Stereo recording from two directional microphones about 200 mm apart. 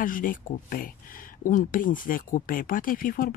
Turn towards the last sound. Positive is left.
turn(degrees=45)  # may be behind; listen again after turning